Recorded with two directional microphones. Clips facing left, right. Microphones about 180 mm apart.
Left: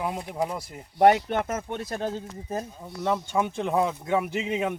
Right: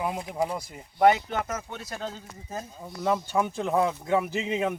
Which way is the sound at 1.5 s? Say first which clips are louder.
Left 5 dB; 55° left (ahead or behind).